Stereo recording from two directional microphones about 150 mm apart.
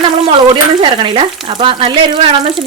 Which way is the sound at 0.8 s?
35° right (ahead or behind).